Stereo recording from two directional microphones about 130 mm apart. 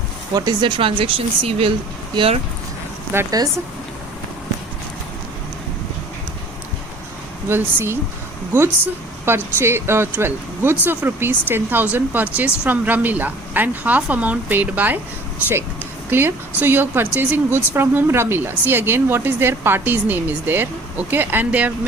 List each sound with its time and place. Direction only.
0.3 s speech: 35° right (ahead or behind)
3.1 s speech: 15° right (ahead or behind)
7.4 s speech: 20° right (ahead or behind)
9.2 s speech: 20° right (ahead or behind)
16.0 s speech: 15° right (ahead or behind)